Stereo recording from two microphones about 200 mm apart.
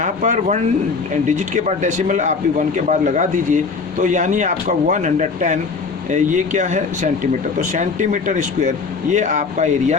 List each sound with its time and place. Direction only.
0.0 s speech: 35° right (ahead or behind)